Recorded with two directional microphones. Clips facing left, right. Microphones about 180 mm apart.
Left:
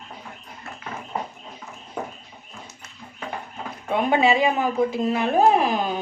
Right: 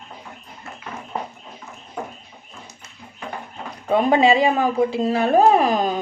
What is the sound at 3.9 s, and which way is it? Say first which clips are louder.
Speech: right 4 dB; 35° right (ahead or behind).